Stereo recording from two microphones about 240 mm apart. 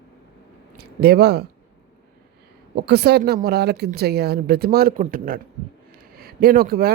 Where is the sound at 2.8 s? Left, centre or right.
Right.